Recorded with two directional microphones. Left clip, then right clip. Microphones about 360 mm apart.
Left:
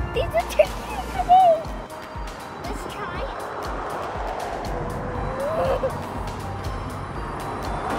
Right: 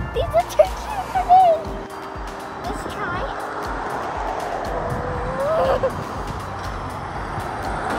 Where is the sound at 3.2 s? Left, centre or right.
Right.